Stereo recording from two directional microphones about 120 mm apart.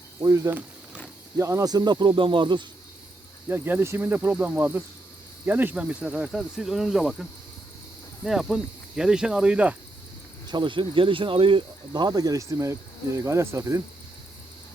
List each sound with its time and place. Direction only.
0.2 s speech: 25° right (ahead or behind); by 2.6 s 40° right (ahead or behind)
3.5 s cricket: 20° right (ahead or behind)
10.4 s speech: 40° right (ahead or behind); by 13.8 s 25° right (ahead or behind)